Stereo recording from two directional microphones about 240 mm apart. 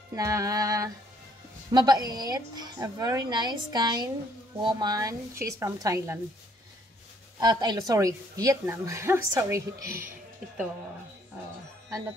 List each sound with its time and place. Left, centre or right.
0.1 s a woman's voice: centre
7.3 s a woman's voice: centre